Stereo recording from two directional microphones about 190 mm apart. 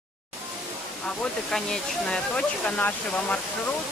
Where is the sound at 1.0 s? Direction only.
5° left (ahead or behind).